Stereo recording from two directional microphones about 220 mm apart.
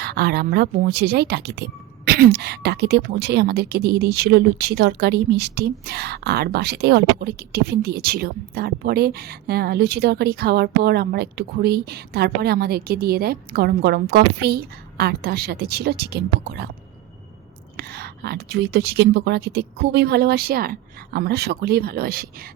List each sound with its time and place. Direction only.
0.0 s speech: 45° right (ahead or behind)
17.7 s speech: 45° right (ahead or behind)